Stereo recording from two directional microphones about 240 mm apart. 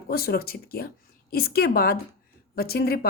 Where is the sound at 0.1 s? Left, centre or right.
Left.